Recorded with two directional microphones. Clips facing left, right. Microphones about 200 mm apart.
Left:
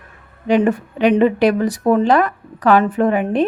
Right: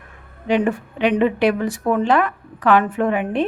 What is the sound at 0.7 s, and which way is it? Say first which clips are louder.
Speech: left 4 dB; 40° left (ahead or behind).